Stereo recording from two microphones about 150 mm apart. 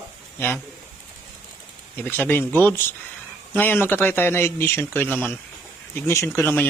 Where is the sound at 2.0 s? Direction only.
15° left (ahead or behind).